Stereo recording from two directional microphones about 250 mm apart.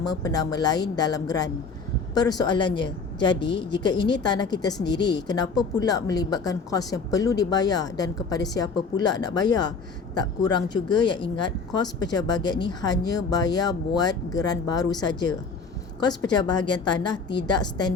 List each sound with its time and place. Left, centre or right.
0.1 s a woman's voice: centre